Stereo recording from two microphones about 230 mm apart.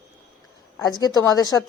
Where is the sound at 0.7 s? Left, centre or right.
Centre.